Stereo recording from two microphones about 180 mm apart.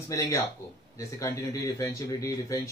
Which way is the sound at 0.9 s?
15° left (ahead or behind).